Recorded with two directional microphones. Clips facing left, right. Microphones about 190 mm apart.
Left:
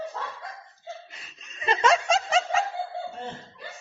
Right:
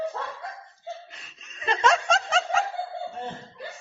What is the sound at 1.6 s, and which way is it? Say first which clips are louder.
Snicker: left 1 dB; 5° left (ahead or behind).